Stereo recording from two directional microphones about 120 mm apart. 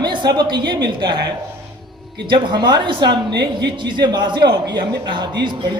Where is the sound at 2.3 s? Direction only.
40° right (ahead or behind).